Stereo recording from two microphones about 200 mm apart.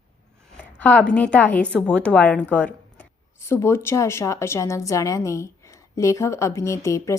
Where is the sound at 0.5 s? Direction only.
10° left (ahead or behind).